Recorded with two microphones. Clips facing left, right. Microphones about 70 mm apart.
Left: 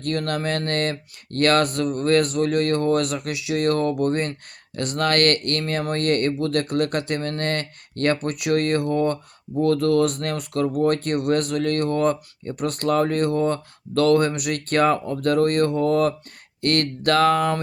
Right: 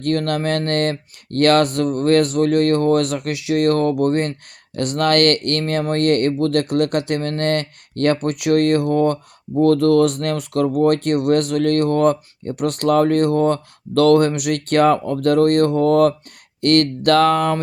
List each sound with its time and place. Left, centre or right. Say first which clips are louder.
0.0 s speech: right 5 dB; right